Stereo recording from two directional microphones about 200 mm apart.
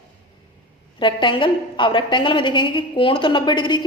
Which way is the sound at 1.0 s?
25° left (ahead or behind).